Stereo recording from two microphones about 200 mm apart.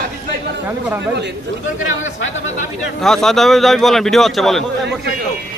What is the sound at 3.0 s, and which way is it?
A man's voice, centre (ahead or behind).